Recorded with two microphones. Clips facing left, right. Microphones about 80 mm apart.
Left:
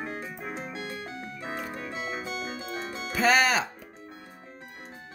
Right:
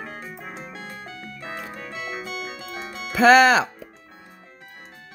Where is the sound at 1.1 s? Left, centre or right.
Left.